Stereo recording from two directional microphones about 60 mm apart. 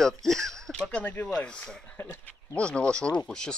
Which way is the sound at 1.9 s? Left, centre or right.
Left.